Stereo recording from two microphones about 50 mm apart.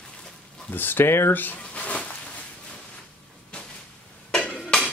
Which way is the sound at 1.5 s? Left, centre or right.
Left.